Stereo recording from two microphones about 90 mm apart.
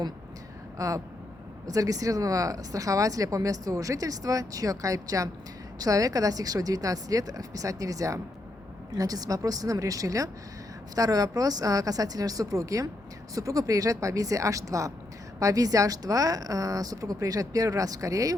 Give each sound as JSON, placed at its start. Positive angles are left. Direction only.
{"t": 0.8, "sound": "speech", "side_deg": -40}